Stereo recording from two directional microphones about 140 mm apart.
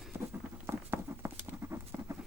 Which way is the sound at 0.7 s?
15° right (ahead or behind).